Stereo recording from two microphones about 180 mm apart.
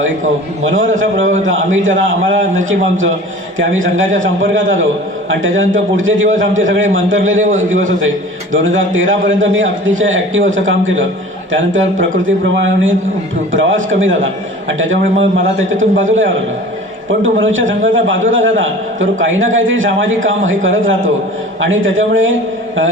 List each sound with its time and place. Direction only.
0.6 s a man's voice: 90° right